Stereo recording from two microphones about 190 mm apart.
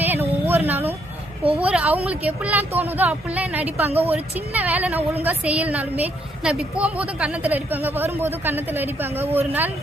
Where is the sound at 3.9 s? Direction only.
30° right (ahead or behind).